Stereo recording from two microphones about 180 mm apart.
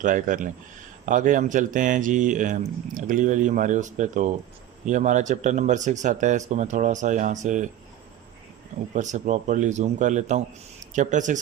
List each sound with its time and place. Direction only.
0.0 s speech: 45° right (ahead or behind)
9.0 s speech: 45° right (ahead or behind)